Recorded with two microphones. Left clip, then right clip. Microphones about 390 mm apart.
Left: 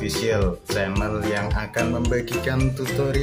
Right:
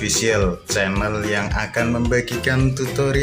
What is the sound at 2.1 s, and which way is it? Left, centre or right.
Speech, left.